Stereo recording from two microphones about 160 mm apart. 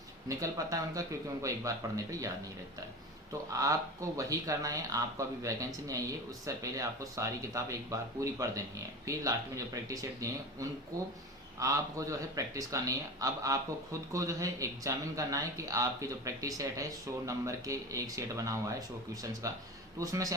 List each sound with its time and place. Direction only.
0.3 s speech: 20° right (ahead or behind)
3.6 s speech: 20° right (ahead or behind)